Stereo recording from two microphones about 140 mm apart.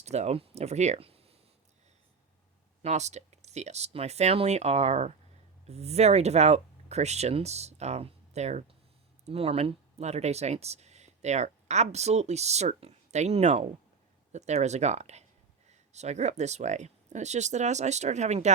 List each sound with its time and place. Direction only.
0.0 s speech: 50° right (ahead or behind)
2.8 s speech: 55° right (ahead or behind)